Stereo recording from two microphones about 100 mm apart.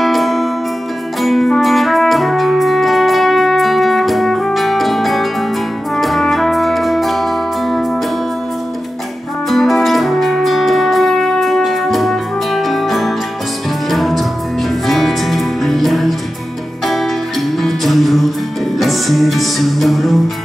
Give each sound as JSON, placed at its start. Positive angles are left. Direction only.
{"t": 0.0, "sound": "music", "side_deg": 0}
{"t": 5.9, "sound": "brass instrument", "side_deg": 0}
{"t": 9.5, "sound": "music", "side_deg": 0}